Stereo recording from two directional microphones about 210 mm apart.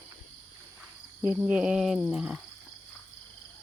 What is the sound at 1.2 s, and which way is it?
Speech, 5° right (ahead or behind).